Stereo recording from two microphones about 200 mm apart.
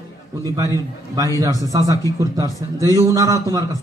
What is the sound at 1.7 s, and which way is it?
A man's voice, 15° right (ahead or behind).